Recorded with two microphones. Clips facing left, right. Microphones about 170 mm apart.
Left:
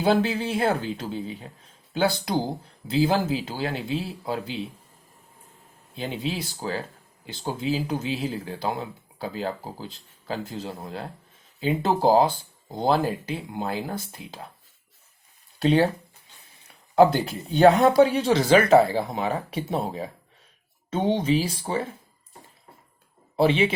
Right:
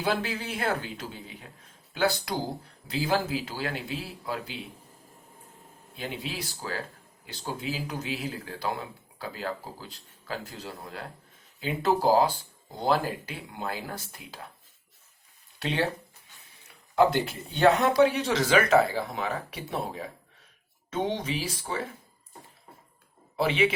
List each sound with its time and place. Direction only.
0.0 s speech: 30° left (ahead or behind)
6.0 s speech: 25° left (ahead or behind)
15.5 s speech: 40° left (ahead or behind)
16.9 s speech: 35° left (ahead or behind)
23.4 s speech: 30° left (ahead or behind)